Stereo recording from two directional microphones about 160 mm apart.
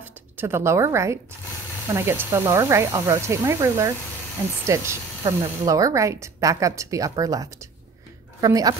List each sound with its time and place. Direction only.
0.0 s a woman's voice: 15° right (ahead or behind)